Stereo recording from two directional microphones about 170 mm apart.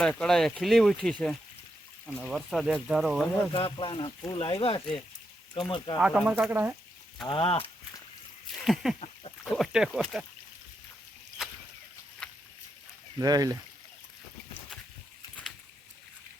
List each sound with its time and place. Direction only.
0.2 s speech: 5° left (ahead or behind)
3.5 s speech: 30° left (ahead or behind)
6.0 s speech: 5° right (ahead or behind)
7.3 s speech: 30° left (ahead or behind)
8.6 s speech: centre (ahead or behind)
11.4 s a sound: centre (ahead or behind)
13.1 s speech: 20° right (ahead or behind)